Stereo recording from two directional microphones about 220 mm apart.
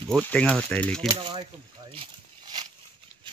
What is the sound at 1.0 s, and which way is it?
Speech, 20° right (ahead or behind).